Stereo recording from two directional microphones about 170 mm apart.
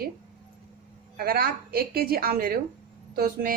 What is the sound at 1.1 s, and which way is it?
A woman's voice, 60° right (ahead or behind).